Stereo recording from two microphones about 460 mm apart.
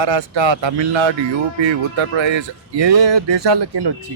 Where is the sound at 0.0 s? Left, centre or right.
Right.